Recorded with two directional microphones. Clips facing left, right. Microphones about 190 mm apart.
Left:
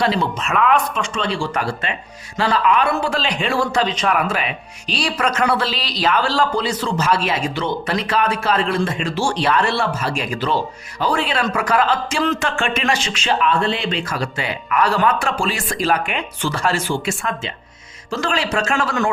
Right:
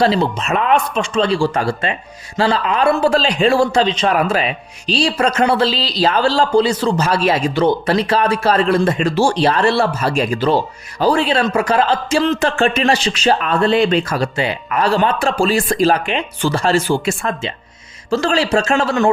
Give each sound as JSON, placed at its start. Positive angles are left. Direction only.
{"t": 0.0, "sound": "a man's voice", "side_deg": -30}